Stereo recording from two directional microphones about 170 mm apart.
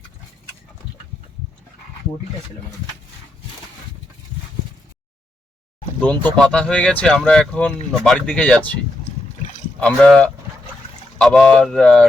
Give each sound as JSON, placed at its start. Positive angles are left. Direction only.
{"t": 6.0, "sound": "speech", "side_deg": 5}
{"t": 9.8, "sound": "speech", "side_deg": 5}